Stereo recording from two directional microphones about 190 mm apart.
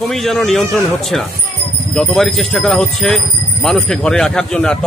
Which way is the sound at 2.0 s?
Centre (ahead or behind).